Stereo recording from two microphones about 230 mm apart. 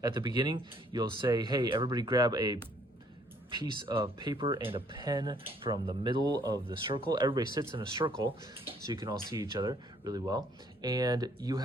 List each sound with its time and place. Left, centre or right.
0.0 s speech: centre